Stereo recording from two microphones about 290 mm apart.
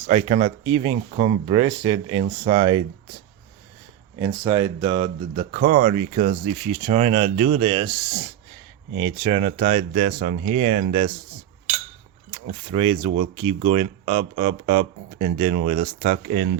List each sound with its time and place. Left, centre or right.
0.1 s speech: right
4.4 s speech: centre
12.7 s speech: centre